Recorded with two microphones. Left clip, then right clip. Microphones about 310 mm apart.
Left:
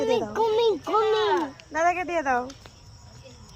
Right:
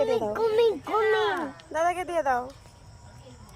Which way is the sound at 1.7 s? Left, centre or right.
Right.